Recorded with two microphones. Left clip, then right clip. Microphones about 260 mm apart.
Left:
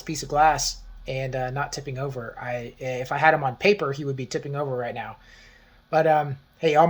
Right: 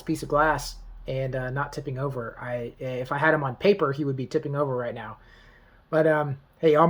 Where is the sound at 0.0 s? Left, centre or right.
Centre.